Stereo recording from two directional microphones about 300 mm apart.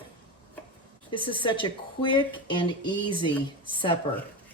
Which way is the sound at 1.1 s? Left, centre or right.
Centre.